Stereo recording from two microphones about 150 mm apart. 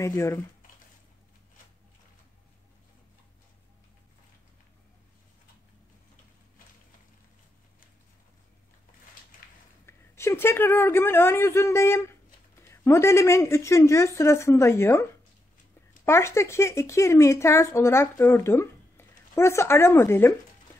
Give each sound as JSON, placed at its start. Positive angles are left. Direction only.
{"t": 0.0, "sound": "speech", "side_deg": 20}
{"t": 9.8, "sound": "a woman's voice", "side_deg": 15}